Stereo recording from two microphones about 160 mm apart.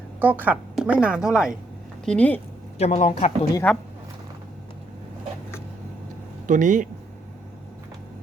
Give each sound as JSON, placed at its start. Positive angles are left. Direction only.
{"t": 0.2, "sound": "a woman's voice", "side_deg": -10}
{"t": 2.0, "sound": "speech", "side_deg": 10}
{"t": 2.7, "sound": "speech", "side_deg": 45}
{"t": 3.7, "sound": "speech", "side_deg": 5}
{"t": 6.5, "sound": "speech", "side_deg": -55}